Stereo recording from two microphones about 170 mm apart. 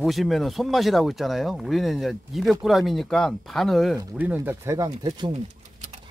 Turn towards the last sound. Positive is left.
turn(degrees=-40)  # may be behind; listen again after turning